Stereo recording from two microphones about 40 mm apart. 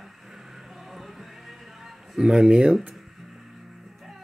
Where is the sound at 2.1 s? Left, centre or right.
Centre.